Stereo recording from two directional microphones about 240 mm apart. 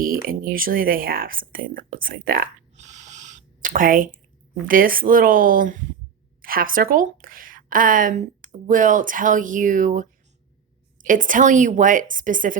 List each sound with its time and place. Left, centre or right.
0.0 s a woman's voice: right